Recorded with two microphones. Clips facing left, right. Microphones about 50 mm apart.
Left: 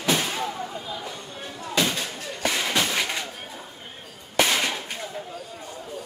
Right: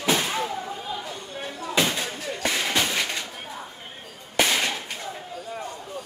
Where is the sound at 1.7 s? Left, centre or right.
Centre.